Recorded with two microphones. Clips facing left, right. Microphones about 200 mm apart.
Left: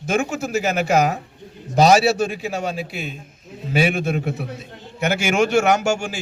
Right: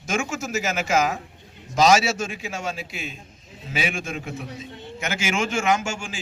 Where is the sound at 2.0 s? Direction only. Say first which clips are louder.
Left 8 dB; 60° left (ahead or behind).